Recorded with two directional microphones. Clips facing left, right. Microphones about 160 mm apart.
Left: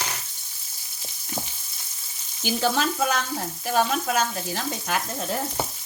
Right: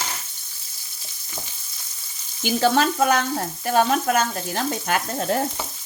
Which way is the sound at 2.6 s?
55° right (ahead or behind).